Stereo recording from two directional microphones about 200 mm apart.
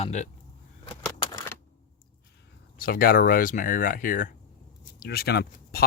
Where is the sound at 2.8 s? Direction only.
45° left (ahead or behind).